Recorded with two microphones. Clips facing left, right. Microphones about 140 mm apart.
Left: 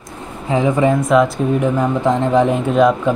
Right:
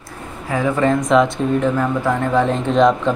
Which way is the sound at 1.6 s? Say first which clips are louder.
Left 2 dB; 20° left (ahead or behind).